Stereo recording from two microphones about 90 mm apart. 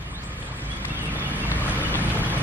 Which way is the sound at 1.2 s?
20° right (ahead or behind).